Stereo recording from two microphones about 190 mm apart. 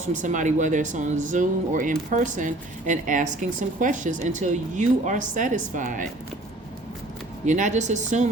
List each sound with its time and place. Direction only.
0.1 s speech: 40° right (ahead or behind)
7.4 s speech: 40° right (ahead or behind)